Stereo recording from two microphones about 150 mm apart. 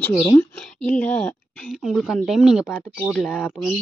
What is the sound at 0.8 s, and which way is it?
Speech, 10° left (ahead or behind).